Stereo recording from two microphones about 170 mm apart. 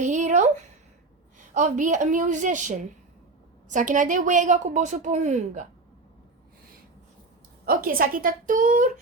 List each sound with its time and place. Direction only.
0.0 s a sound: 45° right (ahead or behind)
1.5 s a woman's voice: 50° right (ahead or behind)
7.6 s a woman's voice: 60° right (ahead or behind)